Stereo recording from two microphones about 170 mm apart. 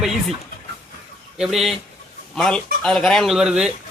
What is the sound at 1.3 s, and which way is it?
Speech, 5° right (ahead or behind).